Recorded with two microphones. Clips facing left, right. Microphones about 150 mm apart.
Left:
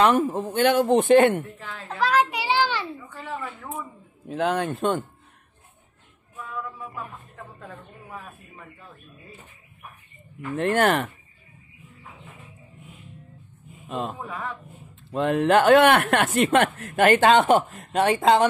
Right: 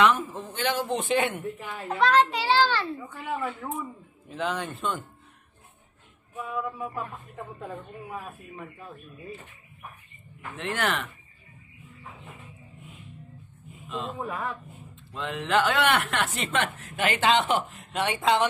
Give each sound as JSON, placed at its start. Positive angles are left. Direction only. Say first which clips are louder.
{"t": 0.0, "sound": "speech", "louder": "left 4 dB", "side_deg": 45}
{"t": 1.9, "sound": "a sound", "louder": "right 1 dB", "side_deg": 5}
{"t": 3.2, "sound": "speech", "louder": "right 1 dB", "side_deg": -10}
{"t": 4.3, "sound": "speech", "louder": "left 6 dB", "side_deg": 50}
{"t": 8.1, "sound": "speech", "louder": "right 1 dB", "side_deg": -10}
{"t": 10.5, "sound": "speech", "louder": "left 8 dB", "side_deg": 50}
{"t": 13.8, "sound": "speech", "louder": "left 4 dB", "side_deg": 50}
{"t": 14.2, "sound": "speech", "louder": "right 1 dB", "side_deg": -5}
{"t": 15.1, "sound": "speech", "louder": "left 7 dB", "side_deg": 50}